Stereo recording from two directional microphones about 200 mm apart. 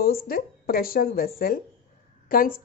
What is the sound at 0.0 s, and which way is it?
A woman's voice, 50° left (ahead or behind).